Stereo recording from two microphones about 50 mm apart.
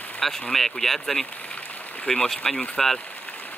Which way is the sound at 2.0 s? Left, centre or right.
Centre.